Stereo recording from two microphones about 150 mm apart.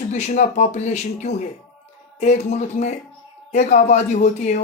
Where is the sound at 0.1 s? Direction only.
50° left (ahead or behind).